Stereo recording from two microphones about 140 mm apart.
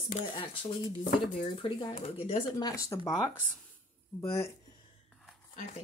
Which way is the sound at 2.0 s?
45° left (ahead or behind).